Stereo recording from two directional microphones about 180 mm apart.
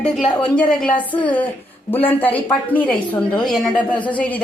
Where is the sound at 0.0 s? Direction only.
5° left (ahead or behind).